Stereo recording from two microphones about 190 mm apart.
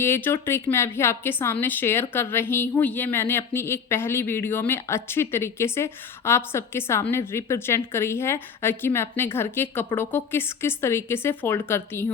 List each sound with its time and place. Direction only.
0.0 s a woman's voice: 10° left (ahead or behind)